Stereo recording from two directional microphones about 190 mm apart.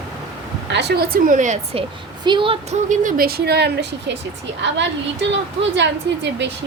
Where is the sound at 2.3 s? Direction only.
25° right (ahead or behind); by 6.5 s 65° right (ahead or behind).